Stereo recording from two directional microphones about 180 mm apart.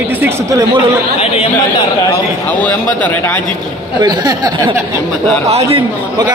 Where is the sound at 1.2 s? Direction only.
30° left (ahead or behind).